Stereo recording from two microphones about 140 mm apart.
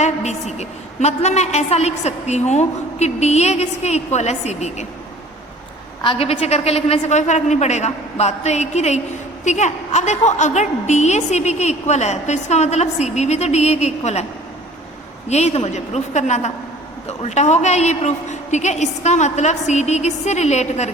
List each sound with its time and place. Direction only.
0.0 s a woman's voice: 55° left (ahead or behind)
6.0 s a woman's voice: 40° left (ahead or behind)
15.3 s a woman's voice: 50° left (ahead or behind)